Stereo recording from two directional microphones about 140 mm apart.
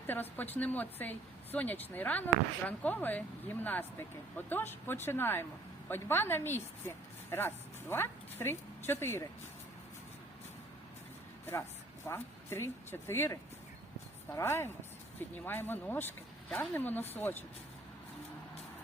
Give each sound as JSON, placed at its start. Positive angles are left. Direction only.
{"t": 0.1, "sound": "speech", "side_deg": 15}
{"t": 12.0, "sound": "speech", "side_deg": 20}